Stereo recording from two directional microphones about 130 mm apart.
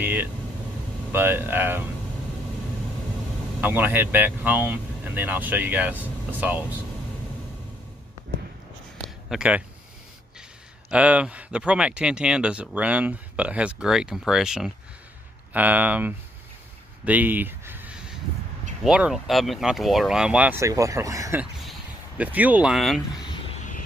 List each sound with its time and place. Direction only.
0.0 s speech: 15° right (ahead or behind)
3.6 s speech: 15° right (ahead or behind)
9.3 s speech: 5° right (ahead or behind)
10.9 s speech: 10° right (ahead or behind)
17.0 s a sound: 15° right (ahead or behind)
18.9 s speech: 5° right (ahead or behind)
20.6 s speech: 25° right (ahead or behind)
21.6 s speech: 10° right (ahead or behind)